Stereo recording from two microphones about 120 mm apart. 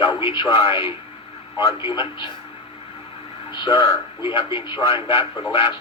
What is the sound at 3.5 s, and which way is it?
A man's voice, 40° left (ahead or behind).